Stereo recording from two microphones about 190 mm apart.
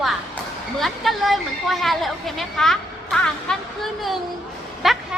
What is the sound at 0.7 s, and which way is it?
A woman's voice, centre (ahead or behind).